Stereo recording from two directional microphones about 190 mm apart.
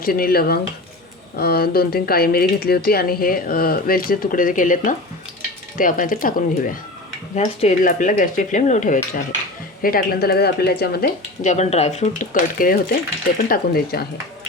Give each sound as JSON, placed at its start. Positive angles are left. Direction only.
{"t": 0.0, "sound": "a woman's voice", "side_deg": 50}
{"t": 11.4, "sound": "speech", "side_deg": 35}